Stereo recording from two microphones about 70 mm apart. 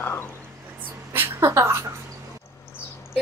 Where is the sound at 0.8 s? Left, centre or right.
Right.